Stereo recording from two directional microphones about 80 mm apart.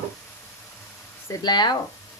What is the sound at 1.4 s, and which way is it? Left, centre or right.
Speech, left.